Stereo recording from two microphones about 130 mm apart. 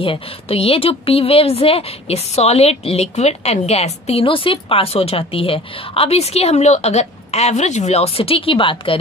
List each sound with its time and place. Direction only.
0.0 s speech: 45° left (ahead or behind)